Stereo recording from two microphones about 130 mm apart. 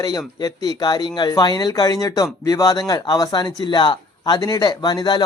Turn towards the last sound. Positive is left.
turn(degrees=30)  # may be behind; listen again after turning